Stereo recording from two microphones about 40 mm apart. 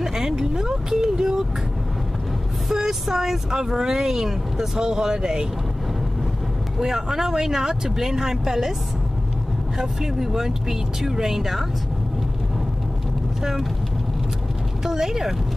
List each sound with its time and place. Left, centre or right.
0.0 s vehicle: centre
2.7 s speech: centre
6.8 s speech: centre
9.8 s speech: centre
13.4 s speech: centre
14.9 s speech: centre